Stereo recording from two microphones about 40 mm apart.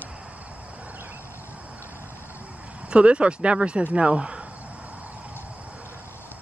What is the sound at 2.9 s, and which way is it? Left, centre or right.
Speech, right.